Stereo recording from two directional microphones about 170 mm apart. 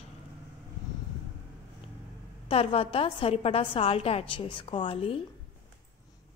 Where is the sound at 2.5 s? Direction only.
35° left (ahead or behind).